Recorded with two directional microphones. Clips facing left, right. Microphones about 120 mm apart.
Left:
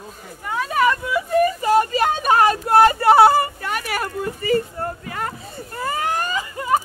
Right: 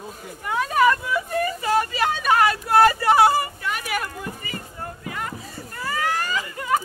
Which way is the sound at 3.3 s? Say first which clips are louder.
Left 4 dB; 55° left (ahead or behind).